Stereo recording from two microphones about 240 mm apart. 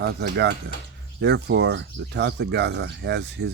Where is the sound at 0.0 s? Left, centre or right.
Right.